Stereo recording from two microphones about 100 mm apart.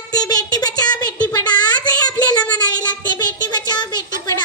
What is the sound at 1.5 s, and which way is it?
Child singing, 45° left (ahead or behind).